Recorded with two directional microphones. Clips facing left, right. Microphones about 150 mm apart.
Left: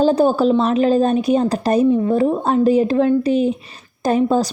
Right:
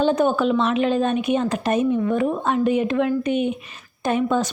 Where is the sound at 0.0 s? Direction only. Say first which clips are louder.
Left 4 dB; 35° left (ahead or behind).